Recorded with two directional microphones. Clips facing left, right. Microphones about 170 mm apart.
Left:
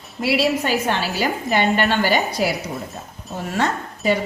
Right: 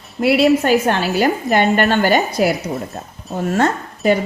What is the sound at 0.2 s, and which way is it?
Speech, 50° right (ahead or behind).